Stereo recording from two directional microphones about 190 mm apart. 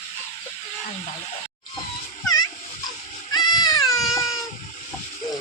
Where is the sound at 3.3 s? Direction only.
20° left (ahead or behind).